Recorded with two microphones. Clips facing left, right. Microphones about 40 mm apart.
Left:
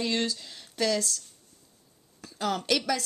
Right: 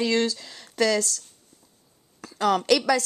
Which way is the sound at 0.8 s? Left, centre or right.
Right.